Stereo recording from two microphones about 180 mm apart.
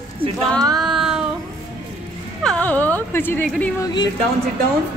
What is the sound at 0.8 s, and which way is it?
Child singing, centre (ahead or behind).